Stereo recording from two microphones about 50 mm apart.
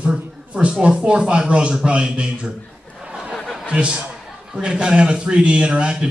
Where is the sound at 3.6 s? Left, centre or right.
Right.